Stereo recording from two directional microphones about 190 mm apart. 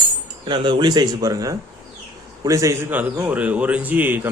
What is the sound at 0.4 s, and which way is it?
A man's voice, 25° right (ahead or behind).